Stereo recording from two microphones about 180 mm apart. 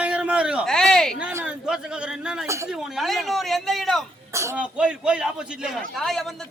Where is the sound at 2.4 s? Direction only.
15° right (ahead or behind).